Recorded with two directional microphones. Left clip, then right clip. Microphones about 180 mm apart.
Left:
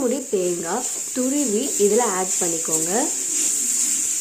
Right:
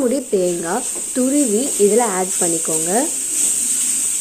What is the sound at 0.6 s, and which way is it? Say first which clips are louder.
Speech: right 3 dB; 25° right (ahead or behind).